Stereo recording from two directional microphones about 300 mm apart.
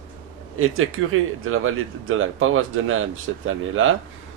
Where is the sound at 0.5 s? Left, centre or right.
Right.